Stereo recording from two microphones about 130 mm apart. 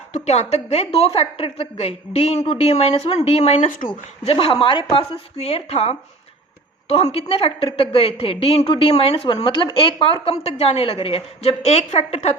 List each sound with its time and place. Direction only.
0.1 s a woman's voice: 55° left (ahead or behind); by 3.8 s 75° left (ahead or behind)
4.3 s a woman's voice: 45° left (ahead or behind)